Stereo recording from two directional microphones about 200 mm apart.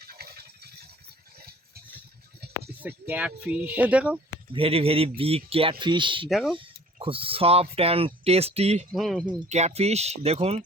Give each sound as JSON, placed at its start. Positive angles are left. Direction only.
{"t": 0.0, "sound": "a sound", "side_deg": -50}
{"t": 2.4, "sound": "a sound", "side_deg": -55}
{"t": 2.8, "sound": "speech", "side_deg": -10}
{"t": 4.5, "sound": "speech", "side_deg": -30}
{"t": 6.2, "sound": "speech", "side_deg": 0}
{"t": 6.6, "sound": "speech", "side_deg": -25}
{"t": 8.9, "sound": "speech", "side_deg": 0}
{"t": 9.5, "sound": "speech", "side_deg": -35}